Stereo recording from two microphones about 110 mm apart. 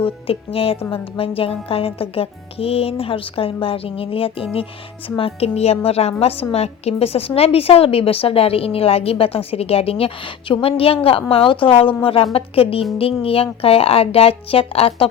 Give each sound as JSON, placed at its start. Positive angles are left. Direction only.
{"t": 0.0, "sound": "a woman's voice", "side_deg": 60}